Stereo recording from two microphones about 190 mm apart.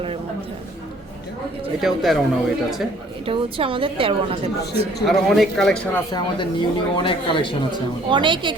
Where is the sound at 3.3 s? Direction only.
25° right (ahead or behind).